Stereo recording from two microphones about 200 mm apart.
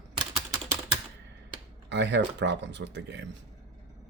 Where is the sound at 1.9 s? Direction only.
60° right (ahead or behind).